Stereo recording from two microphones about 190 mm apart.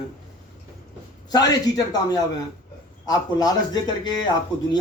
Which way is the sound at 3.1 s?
20° left (ahead or behind).